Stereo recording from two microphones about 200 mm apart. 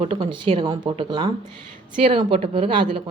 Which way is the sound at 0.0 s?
30° right (ahead or behind).